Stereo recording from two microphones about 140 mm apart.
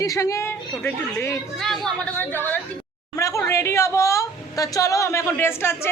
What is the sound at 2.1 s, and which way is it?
A woman's voice, 15° left (ahead or behind).